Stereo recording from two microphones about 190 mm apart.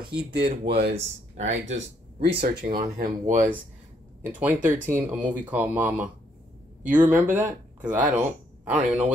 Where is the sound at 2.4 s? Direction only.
50° right (ahead or behind).